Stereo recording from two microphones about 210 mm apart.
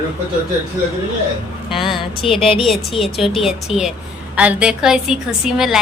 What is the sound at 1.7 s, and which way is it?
Speech, centre (ahead or behind).